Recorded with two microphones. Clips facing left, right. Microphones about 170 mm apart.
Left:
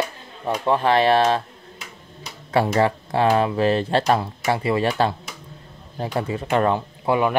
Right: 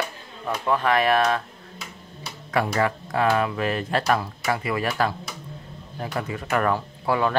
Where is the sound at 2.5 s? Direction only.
30° left (ahead or behind).